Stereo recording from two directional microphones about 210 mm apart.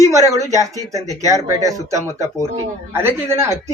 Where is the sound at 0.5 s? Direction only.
15° right (ahead or behind).